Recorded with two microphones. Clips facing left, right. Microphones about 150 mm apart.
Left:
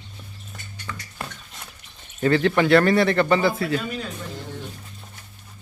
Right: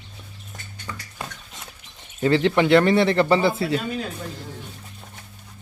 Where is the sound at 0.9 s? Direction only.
20° right (ahead or behind).